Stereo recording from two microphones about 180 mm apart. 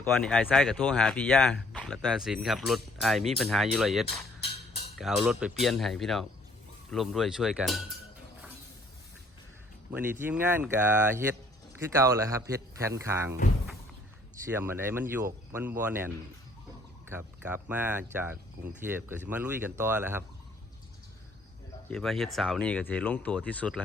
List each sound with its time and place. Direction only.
0.0 s speech: 5° left (ahead or behind)
9.9 s speech: 10° right (ahead or behind)
14.5 s speech: 10° right (ahead or behind)
21.8 s speech: centre (ahead or behind)